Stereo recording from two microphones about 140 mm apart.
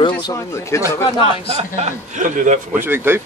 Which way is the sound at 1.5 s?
50° right (ahead or behind).